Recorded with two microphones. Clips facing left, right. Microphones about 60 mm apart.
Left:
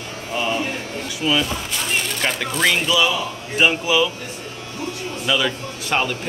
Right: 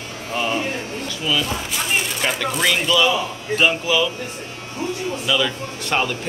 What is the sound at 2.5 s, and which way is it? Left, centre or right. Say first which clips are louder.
Speech: left 1 dB; centre.